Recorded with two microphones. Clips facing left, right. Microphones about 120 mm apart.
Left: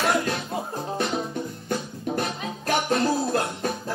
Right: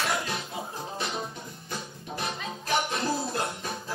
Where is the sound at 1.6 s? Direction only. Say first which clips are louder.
Left 8 dB; 55° left (ahead or behind).